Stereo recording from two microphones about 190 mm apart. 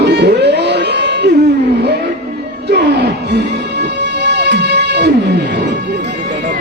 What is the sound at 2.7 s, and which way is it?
Music, 65° right (ahead or behind).